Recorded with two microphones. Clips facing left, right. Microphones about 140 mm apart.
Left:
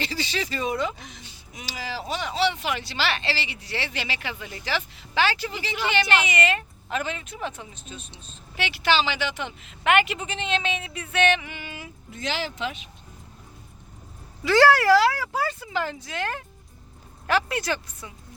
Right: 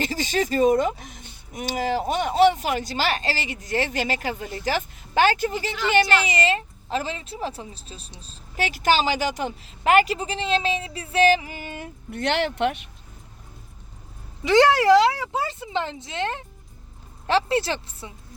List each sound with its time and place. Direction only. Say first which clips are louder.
0.0 s speech: right 5 dB; 45° right (ahead or behind)
6.2 s speech: right 2 dB; 30° right (ahead or behind); by 12.8 s 65° right (ahead or behind)
14.4 s speech: right 1 dB; 20° right (ahead or behind)